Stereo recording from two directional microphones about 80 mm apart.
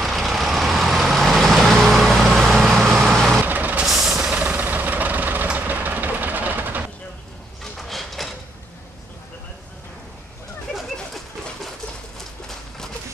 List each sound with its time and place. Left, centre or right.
0.0 s vehicle: centre
3.3 s vehicle: right
3.8 s vehicle: centre
4.3 s vehicle: centre
7.6 s a sound: centre
12.4 s a sound: centre